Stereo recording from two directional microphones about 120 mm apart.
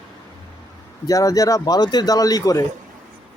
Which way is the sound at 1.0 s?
30° left (ahead or behind).